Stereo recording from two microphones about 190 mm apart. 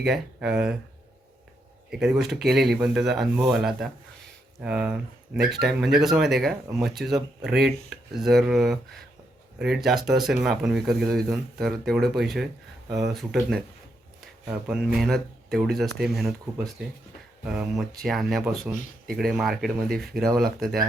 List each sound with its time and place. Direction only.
0.0 s speech: centre (ahead or behind)
1.9 s speech: centre (ahead or behind)